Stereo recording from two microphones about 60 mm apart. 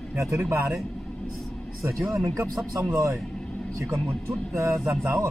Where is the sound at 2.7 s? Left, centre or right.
Right.